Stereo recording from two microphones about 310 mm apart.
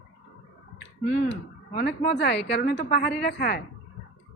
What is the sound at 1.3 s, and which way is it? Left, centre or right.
A woman's voice, left.